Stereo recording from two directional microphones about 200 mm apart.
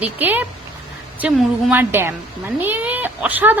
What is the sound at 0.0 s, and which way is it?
Speech, 10° right (ahead or behind).